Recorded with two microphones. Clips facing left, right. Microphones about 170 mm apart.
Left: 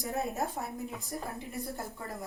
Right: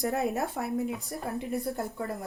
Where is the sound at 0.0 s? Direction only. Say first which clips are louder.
Right 5 dB; 65° right (ahead or behind).